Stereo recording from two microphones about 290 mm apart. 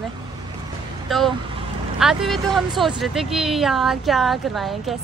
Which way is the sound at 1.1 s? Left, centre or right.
Centre.